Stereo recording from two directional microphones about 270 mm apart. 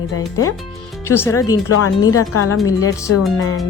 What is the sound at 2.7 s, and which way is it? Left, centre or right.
Speech, centre.